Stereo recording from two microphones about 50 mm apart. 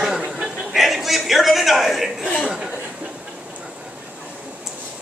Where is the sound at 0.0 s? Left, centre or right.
Centre.